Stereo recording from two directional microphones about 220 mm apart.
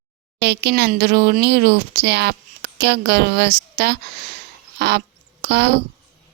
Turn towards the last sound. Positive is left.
turn(degrees=-50)  # may be behind; listen again after turning